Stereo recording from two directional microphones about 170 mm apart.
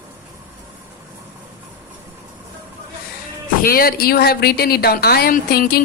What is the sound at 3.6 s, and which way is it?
Speech, 60° left (ahead or behind).